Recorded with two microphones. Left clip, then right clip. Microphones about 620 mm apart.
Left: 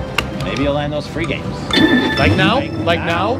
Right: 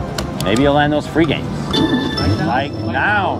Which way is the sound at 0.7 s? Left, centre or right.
Right.